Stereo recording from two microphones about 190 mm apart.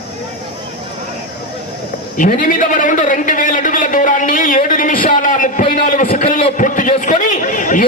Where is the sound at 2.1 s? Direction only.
45° left (ahead or behind).